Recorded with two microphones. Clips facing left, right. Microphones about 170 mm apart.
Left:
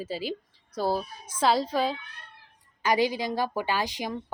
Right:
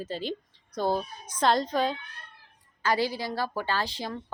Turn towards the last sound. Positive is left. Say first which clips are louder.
# left 2 dB
turn(degrees=15)  # may be behind; listen again after turning